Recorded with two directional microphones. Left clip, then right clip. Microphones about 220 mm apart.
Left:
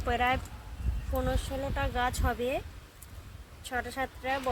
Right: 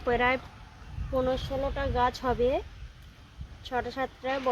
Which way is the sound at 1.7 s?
30° right (ahead or behind).